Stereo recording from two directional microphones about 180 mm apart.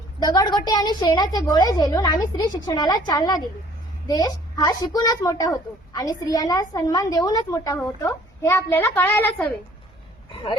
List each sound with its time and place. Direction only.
0.2 s a woman's voice: 20° left (ahead or behind)